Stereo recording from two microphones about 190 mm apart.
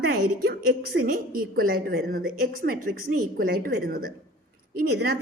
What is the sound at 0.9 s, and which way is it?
A woman's voice, 50° right (ahead or behind).